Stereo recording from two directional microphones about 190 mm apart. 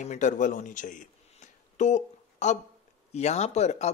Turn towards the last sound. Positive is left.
turn(degrees=35)  # may be behind; listen again after turning